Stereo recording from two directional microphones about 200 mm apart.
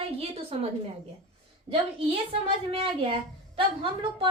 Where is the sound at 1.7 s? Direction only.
30° right (ahead or behind).